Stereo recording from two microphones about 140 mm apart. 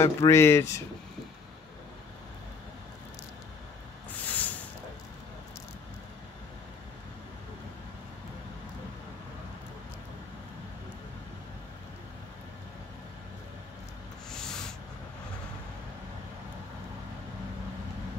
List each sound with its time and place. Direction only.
0.0 s speech: 20° left (ahead or behind)
4.2 s hiss: 10° left (ahead or behind)
14.3 s a sound: 5° left (ahead or behind)